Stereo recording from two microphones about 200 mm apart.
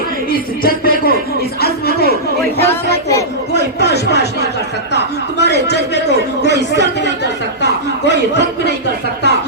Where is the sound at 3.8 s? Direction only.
55° left (ahead or behind).